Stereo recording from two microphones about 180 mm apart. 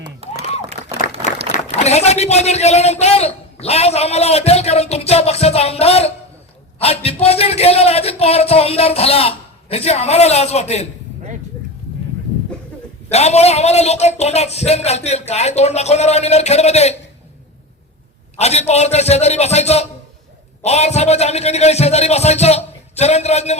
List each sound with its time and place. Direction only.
0.2 s a sound: 35° right (ahead or behind)
1.7 s a man's voice: 35° left (ahead or behind)
13.1 s a man's voice: 35° left (ahead or behind)
18.3 s a man's voice: 35° left (ahead or behind)